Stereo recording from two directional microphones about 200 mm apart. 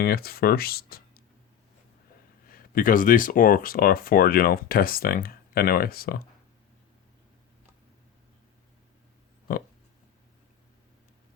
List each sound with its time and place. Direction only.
0.0 s speech: 50° left (ahead or behind)
2.5 s speech: 45° left (ahead or behind)